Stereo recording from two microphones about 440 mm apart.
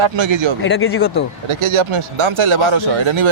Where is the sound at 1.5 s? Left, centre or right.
Right.